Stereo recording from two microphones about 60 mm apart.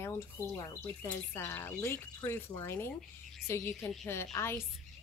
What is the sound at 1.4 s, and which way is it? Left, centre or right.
Speech, left.